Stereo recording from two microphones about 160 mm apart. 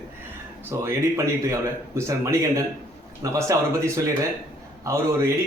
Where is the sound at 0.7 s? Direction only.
20° right (ahead or behind).